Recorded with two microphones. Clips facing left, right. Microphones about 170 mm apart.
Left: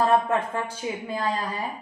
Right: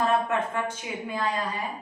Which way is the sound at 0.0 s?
30° left (ahead or behind).